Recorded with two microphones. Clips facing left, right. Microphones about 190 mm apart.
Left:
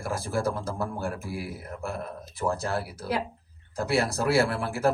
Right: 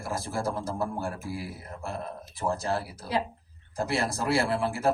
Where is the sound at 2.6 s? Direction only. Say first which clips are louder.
Even; 65° left (ahead or behind).